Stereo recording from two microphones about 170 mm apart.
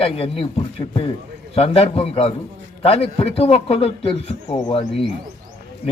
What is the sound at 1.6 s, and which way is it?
A man's voice, 35° left (ahead or behind).